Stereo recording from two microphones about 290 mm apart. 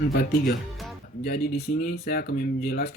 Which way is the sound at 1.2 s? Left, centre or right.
Left.